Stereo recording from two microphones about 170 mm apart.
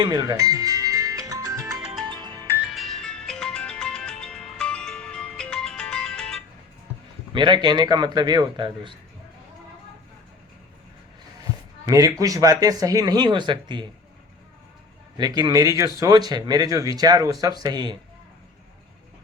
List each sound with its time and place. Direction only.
0.0 s music: 25° right (ahead or behind)
1.8 s music: 5° right (ahead or behind)
7.3 s a man's voice: 25° right (ahead or behind)
11.9 s a man's voice: 20° right (ahead or behind)
15.2 s a man's voice: 25° right (ahead or behind)